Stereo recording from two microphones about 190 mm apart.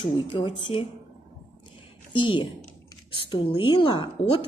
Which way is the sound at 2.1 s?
25° left (ahead or behind).